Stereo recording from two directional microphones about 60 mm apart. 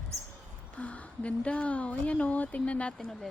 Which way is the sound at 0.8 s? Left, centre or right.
Left.